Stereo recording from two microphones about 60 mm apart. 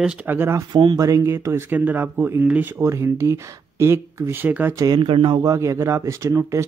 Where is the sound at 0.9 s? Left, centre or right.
Right.